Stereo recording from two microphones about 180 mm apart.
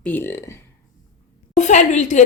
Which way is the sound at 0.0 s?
10° left (ahead or behind).